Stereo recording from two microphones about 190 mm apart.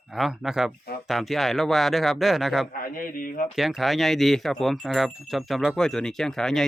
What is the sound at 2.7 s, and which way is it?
Speech, 50° left (ahead or behind).